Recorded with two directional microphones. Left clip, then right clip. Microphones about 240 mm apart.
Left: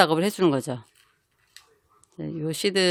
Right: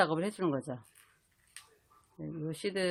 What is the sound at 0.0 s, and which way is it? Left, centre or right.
Speech, left.